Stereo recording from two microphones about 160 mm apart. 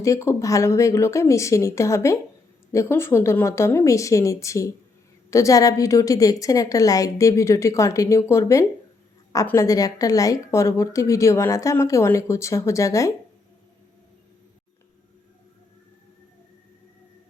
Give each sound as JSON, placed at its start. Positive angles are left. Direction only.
{"t": 0.0, "sound": "speech", "side_deg": 20}